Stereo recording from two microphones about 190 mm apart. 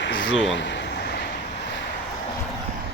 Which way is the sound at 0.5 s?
70° left (ahead or behind).